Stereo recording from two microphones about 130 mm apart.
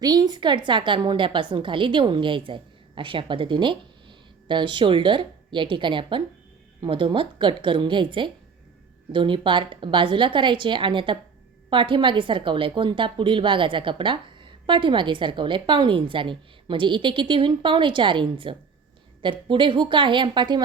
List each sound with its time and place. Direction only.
0.0 s a woman's voice: 30° right (ahead or behind)